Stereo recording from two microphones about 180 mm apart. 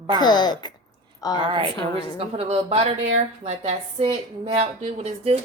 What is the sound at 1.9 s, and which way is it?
A woman's voice, 35° right (ahead or behind).